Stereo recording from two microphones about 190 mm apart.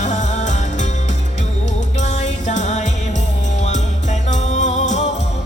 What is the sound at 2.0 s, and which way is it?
Music, 35° left (ahead or behind).